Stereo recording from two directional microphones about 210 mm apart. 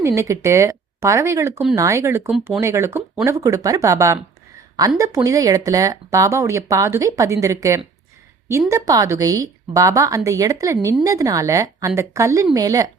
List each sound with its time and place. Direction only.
0.0 s speech: 15° right (ahead or behind)